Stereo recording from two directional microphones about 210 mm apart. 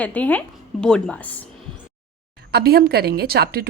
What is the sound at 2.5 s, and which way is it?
A woman's voice, 50° right (ahead or behind).